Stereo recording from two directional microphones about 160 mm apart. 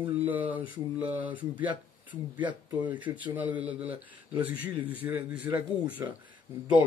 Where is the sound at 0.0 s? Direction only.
10° right (ahead or behind).